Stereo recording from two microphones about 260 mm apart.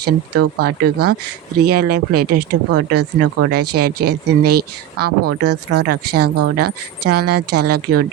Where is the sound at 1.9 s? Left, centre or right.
Right.